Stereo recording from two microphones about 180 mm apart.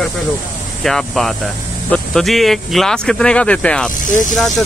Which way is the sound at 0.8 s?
Centre (ahead or behind).